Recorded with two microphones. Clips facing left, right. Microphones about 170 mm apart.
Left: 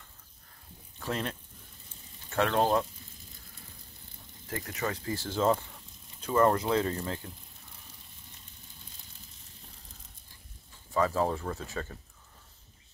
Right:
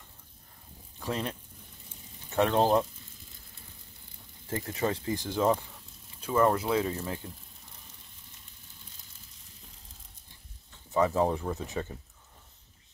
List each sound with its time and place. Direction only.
0.9 s speech: 10° right (ahead or behind)
4.5 s speech: 25° right (ahead or behind); by 7.2 s 10° right (ahead or behind)
10.9 s speech: 20° right (ahead or behind)